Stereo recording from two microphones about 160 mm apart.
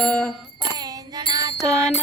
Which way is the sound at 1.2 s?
25° right (ahead or behind).